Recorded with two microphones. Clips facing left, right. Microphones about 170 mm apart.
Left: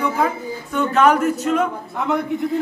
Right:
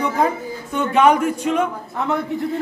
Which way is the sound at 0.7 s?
10° right (ahead or behind).